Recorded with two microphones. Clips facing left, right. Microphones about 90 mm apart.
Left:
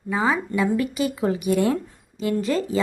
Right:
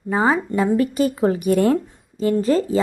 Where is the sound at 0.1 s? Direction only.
40° right (ahead or behind).